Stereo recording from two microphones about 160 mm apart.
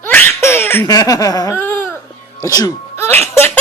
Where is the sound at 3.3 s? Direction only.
15° left (ahead or behind).